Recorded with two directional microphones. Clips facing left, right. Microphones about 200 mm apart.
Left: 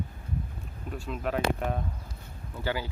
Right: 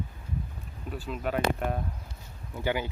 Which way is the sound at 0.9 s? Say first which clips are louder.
Even; centre (ahead or behind).